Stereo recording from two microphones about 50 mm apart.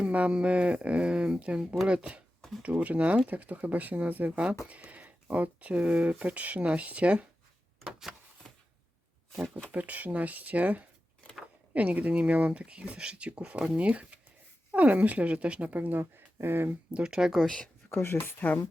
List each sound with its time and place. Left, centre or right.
0.0 s a woman's voice: right
9.7 s a woman's voice: right
16.9 s speech: centre
17.9 s speech: left